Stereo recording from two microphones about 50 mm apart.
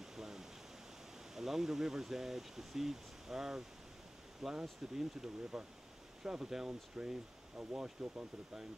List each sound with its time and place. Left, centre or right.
0.0 s pink noise: centre
1.3 s speech: centre